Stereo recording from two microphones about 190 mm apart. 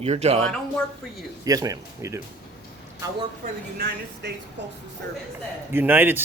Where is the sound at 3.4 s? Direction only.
55° right (ahead or behind).